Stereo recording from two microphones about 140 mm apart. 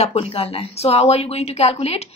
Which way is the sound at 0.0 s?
45° left (ahead or behind).